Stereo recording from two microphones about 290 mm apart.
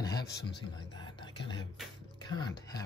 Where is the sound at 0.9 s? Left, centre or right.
Centre.